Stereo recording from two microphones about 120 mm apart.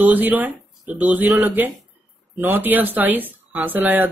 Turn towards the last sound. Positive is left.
turn(degrees=-15)  # may be behind; listen again after turning